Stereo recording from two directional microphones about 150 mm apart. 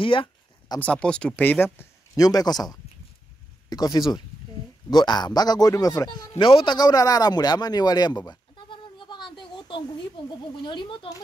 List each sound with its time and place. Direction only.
0.0 s a sound: 35° left (ahead or behind)
0.7 s speech: 5° left (ahead or behind)
2.2 s a man's voice: 25° left (ahead or behind)